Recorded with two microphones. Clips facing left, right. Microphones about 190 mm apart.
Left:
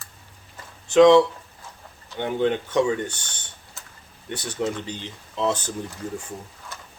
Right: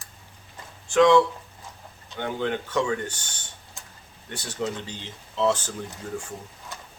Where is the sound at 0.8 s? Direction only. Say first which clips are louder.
Left 4 dB; 20° left (ahead or behind).